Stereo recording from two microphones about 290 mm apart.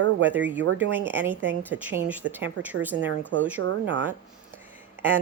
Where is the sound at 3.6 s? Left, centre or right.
Right.